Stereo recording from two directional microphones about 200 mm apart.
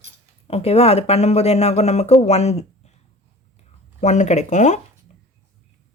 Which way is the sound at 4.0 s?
35° left (ahead or behind).